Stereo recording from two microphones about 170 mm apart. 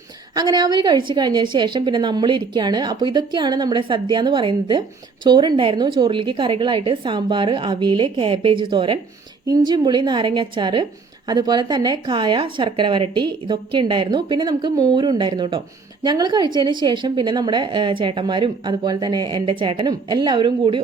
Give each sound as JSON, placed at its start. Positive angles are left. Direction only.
{"t": 0.3, "sound": "a woman's voice", "side_deg": -25}